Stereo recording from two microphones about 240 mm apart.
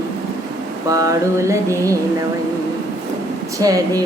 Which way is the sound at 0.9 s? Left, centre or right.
Centre.